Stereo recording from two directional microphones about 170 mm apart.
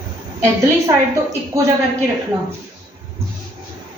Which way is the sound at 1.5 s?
20° right (ahead or behind).